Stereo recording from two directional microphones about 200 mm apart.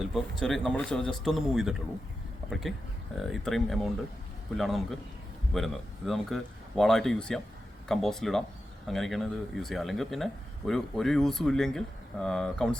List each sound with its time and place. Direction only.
0.0 s speech: centre (ahead or behind)